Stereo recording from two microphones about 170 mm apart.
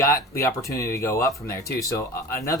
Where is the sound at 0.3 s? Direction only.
15° left (ahead or behind).